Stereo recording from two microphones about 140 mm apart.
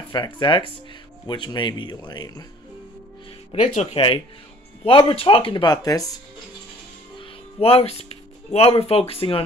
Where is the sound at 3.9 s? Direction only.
40° left (ahead or behind).